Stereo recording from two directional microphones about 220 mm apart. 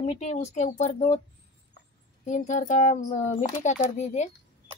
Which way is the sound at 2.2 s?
35° left (ahead or behind).